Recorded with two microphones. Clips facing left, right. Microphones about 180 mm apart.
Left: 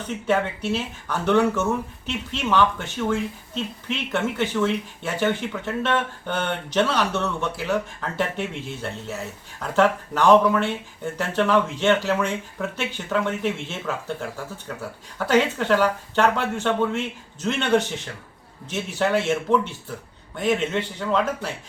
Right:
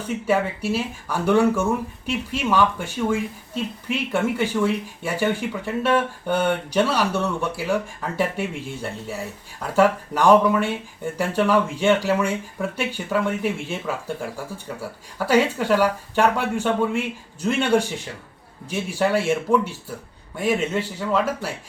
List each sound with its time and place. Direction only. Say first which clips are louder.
0.0 s speech: right 1 dB; 10° right (ahead or behind)